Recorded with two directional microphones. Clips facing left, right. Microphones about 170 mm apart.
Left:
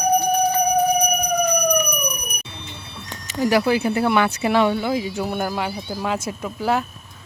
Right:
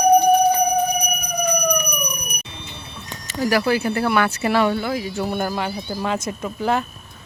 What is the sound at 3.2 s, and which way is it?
Speech, 20° left (ahead or behind).